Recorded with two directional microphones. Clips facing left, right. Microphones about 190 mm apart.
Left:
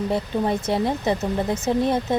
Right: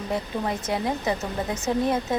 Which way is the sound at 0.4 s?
30° left (ahead or behind).